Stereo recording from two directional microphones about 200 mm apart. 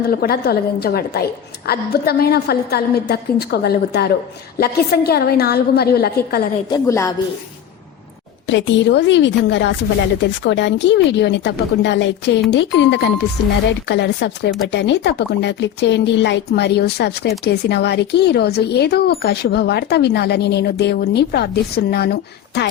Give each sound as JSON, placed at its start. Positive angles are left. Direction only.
{"t": 0.1, "sound": "a woman's voice", "side_deg": 50}
{"t": 6.7, "sound": "a woman's voice", "side_deg": 15}
{"t": 8.4, "sound": "speech", "side_deg": 65}